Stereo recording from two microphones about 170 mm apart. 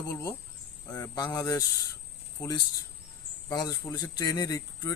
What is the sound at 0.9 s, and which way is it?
Speech, 20° left (ahead or behind).